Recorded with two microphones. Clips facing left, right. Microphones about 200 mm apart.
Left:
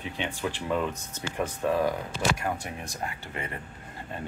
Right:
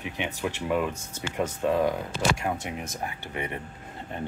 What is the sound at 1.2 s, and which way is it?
Speech, 20° right (ahead or behind).